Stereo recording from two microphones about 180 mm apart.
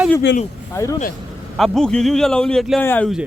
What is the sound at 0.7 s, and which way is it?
Speech, 15° left (ahead or behind).